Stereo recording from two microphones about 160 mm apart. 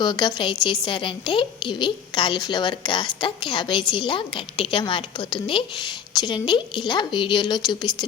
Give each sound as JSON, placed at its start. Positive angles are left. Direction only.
{"t": 0.0, "sound": "a woman's voice", "side_deg": 25}